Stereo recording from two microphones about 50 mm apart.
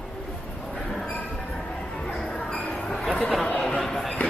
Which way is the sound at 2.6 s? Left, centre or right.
Left.